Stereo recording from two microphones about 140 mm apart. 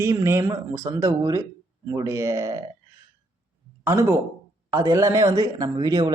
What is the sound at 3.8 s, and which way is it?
A man's voice, 15° right (ahead or behind).